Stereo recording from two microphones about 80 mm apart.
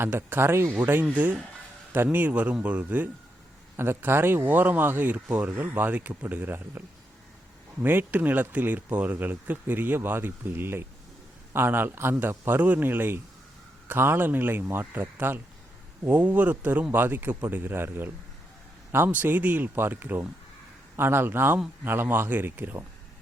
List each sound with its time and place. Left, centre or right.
0.0 s speech: right
3.8 s speech: right